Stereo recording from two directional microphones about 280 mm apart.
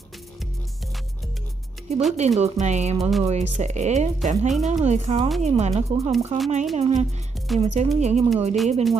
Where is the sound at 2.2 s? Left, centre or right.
Right.